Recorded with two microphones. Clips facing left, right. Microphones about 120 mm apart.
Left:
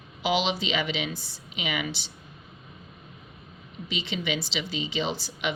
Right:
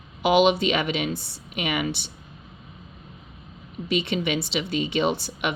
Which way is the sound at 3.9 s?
60° right (ahead or behind).